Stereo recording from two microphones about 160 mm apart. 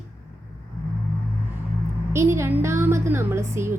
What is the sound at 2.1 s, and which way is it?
A woman's voice, 15° right (ahead or behind).